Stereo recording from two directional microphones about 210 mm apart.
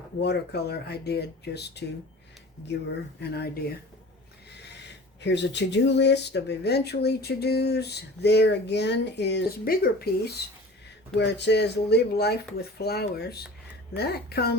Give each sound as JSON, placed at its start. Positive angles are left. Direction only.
{"t": 0.2, "sound": "speech", "side_deg": 50}
{"t": 3.2, "sound": "speech", "side_deg": 50}
{"t": 4.5, "sound": "speech", "side_deg": 55}